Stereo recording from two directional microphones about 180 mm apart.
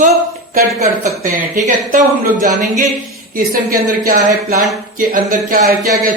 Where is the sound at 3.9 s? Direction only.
50° right (ahead or behind).